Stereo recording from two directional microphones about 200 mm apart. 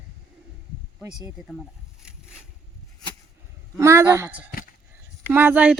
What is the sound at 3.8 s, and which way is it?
Speech, 15° right (ahead or behind).